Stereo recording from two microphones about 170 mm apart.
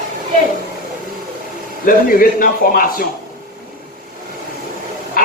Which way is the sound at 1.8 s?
55° left (ahead or behind).